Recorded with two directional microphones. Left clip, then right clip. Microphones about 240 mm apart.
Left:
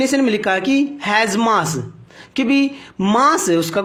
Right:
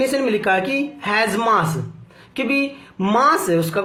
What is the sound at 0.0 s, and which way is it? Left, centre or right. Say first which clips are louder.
Speech: left 2 dB; left.